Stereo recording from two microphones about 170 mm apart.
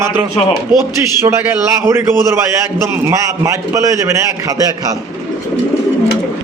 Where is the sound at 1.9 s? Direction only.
15° right (ahead or behind).